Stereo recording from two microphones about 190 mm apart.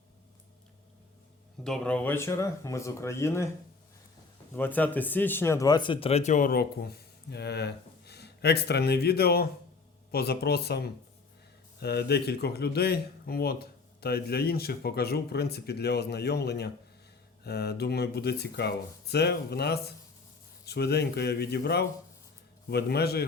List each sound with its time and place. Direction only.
1.6 s speech: 5° left (ahead or behind)
4.5 s speech: 10° left (ahead or behind); by 23.2 s 55° left (ahead or behind)